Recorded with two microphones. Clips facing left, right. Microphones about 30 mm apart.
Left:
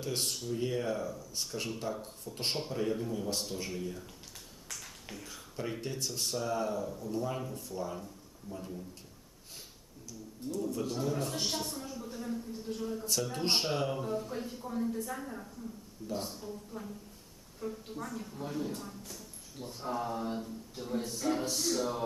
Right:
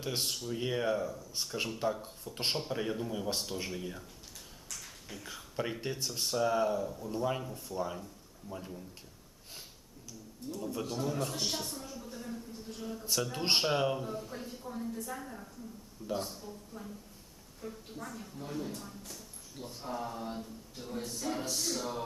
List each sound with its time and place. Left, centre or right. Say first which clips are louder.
0.2 s speech: even; centre
0.5 s speech: right 1 dB; right
0.9 s speech: right 2 dB; centre
3.3 s speech: even; centre
5.2 s speech: right 3 dB; centre
6.4 s speech: right 5 dB; centre
10.5 s speech: left 3 dB; centre
10.9 s speech: left 1 dB; centre
14.0 s speech: left 4 dB; centre